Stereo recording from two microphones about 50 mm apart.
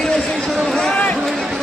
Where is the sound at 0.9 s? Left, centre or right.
Left.